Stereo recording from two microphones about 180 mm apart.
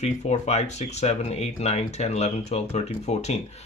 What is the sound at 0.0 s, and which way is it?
Speech, 40° left (ahead or behind).